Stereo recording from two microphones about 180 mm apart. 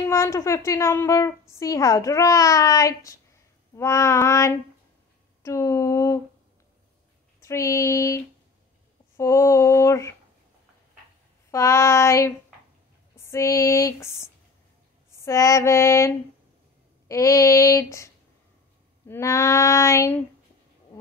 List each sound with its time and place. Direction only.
0.1 s a woman's voice: 15° left (ahead or behind)
7.4 s a woman's voice: 15° left (ahead or behind)
11.5 s a woman's voice: 15° left (ahead or behind)
17.1 s a woman's voice: 15° left (ahead or behind)